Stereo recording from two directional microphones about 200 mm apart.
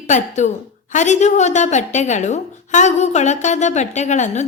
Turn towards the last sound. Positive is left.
turn(degrees=35)  # may be behind; listen again after turning